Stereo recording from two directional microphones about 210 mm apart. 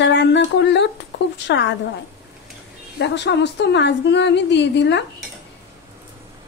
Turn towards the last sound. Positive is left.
turn(degrees=55)  # may be behind; listen again after turning